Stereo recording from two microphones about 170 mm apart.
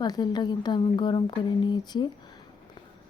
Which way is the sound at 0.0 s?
25° left (ahead or behind).